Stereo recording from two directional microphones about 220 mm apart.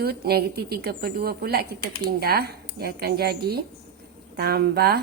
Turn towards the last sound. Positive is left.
turn(degrees=-45)  # may be behind; listen again after turning